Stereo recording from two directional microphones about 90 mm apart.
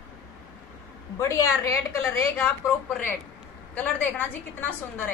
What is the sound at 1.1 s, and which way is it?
A woman's voice, 35° left (ahead or behind).